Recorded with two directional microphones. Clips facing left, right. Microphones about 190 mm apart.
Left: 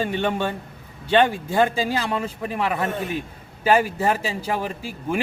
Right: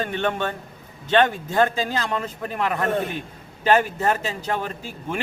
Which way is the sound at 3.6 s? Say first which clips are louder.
Even; 10° left (ahead or behind).